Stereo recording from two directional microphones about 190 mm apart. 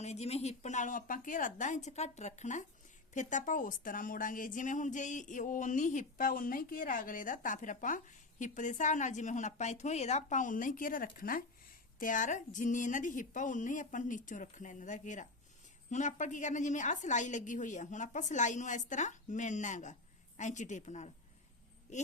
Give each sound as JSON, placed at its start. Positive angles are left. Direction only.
{"t": 0.0, "sound": "a woman's voice", "side_deg": 35}